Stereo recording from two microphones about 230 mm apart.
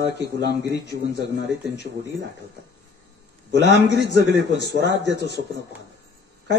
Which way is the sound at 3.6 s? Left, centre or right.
Left.